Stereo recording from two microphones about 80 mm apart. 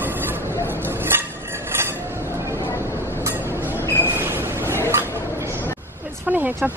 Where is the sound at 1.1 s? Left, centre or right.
Right.